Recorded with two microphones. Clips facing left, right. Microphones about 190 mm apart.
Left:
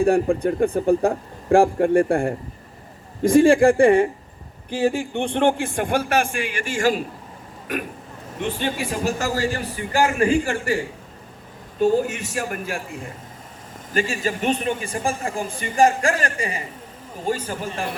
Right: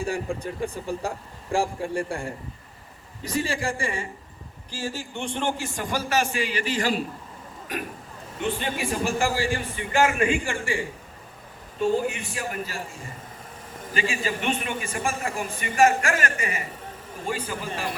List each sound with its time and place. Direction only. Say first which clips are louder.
0.0 s speech: left 11 dB; 60° left (ahead or behind)
9.0 s speech: left 2 dB; 40° left (ahead or behind)
11.8 s speech: left 5 dB; 40° left (ahead or behind)
13.9 s speech: left 4 dB; 45° left (ahead or behind)
17.2 s speech: left 5 dB; 45° left (ahead or behind)